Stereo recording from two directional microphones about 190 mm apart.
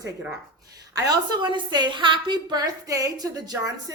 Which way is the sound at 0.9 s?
20° right (ahead or behind).